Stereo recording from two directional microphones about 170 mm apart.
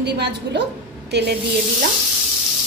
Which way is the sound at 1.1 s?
80° right.